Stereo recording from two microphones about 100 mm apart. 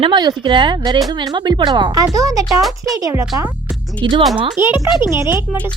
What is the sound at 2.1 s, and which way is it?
Speech, 35° right (ahead or behind).